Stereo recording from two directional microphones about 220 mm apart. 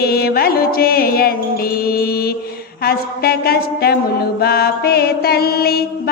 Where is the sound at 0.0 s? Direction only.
45° left (ahead or behind).